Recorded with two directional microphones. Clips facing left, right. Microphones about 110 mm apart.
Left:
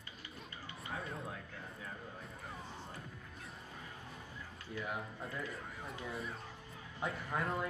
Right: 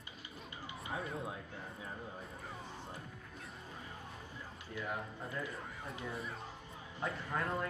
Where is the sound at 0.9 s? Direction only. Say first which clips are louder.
Right 3 dB; centre (ahead or behind).